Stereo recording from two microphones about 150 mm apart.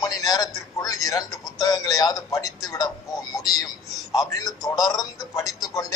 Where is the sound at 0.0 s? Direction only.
25° left (ahead or behind).